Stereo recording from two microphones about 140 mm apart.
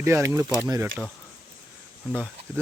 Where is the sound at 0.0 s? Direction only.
20° right (ahead or behind).